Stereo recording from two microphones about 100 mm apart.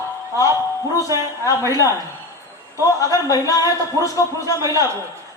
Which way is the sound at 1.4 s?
35° left (ahead or behind).